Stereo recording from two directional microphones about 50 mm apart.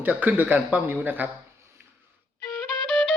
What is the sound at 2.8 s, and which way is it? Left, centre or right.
Music, left.